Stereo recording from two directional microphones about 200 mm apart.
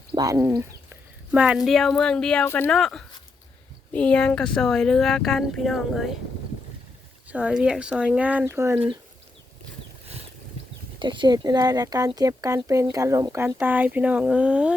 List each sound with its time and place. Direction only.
0.1 s speech: 15° right (ahead or behind); by 6.1 s centre (ahead or behind)
7.3 s speech: 5° right (ahead or behind)
11.0 s speech: 25° right (ahead or behind); by 14.8 s 5° right (ahead or behind)